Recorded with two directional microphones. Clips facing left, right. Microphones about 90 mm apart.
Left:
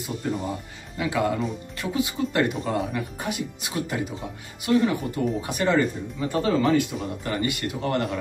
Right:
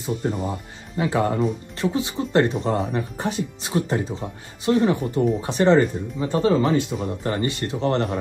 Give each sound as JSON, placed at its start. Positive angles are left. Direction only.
{"t": 0.2, "sound": "speech", "side_deg": -30}